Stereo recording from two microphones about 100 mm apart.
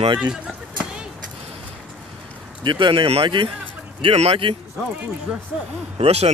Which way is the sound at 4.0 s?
80° right.